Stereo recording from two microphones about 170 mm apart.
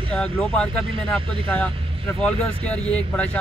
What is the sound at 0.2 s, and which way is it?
Speech, 5° left (ahead or behind).